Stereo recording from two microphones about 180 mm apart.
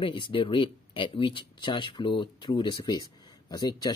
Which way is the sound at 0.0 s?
30° left (ahead or behind).